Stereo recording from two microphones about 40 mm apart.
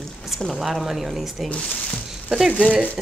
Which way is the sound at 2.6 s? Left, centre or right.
Right.